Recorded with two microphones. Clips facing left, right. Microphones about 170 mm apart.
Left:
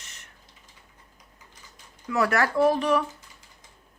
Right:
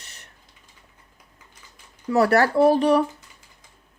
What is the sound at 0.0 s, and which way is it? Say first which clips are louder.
Typing: right 2 dB; 35° right (ahead or behind).